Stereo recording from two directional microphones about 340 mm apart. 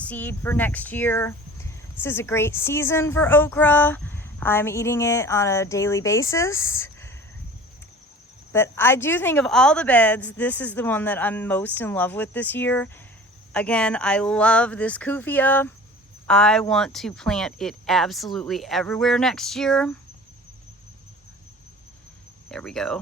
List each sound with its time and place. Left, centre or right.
0.0 s speech: centre
8.5 s a woman's voice: centre
22.4 s a woman's voice: centre